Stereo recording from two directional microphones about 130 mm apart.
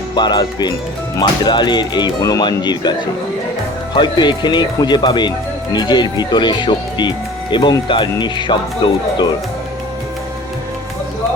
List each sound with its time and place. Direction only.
0.2 s speech: 35° left (ahead or behind)
3.9 s speech: 35° left (ahead or behind)